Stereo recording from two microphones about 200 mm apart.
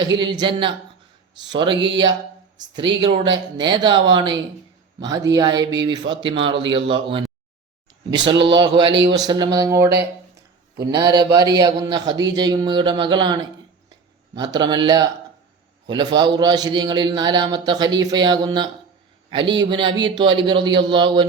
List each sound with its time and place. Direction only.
0.0 s a man's voice: 20° right (ahead or behind)
3.0 s a man's voice: 25° right (ahead or behind)
8.2 s a man's voice: 25° right (ahead or behind)
10.9 s a man's voice: 20° right (ahead or behind)
19.7 s a man's voice: 25° right (ahead or behind)